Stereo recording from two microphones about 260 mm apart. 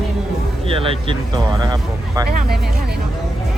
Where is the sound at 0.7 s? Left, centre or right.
Right.